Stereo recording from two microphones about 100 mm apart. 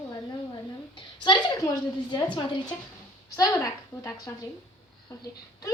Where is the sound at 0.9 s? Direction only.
50° left (ahead or behind).